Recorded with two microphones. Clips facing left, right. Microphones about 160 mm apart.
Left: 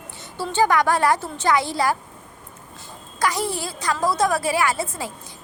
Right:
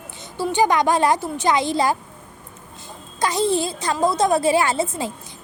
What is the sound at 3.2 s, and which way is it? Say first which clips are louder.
A woman's voice: right 4 dB; 20° right (ahead or behind).